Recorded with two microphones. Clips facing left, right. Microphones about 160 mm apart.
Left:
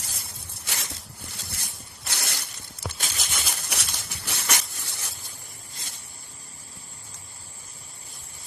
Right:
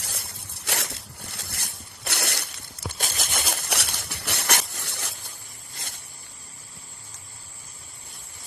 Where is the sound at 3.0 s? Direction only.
50° right (ahead or behind); by 5.1 s 70° right (ahead or behind).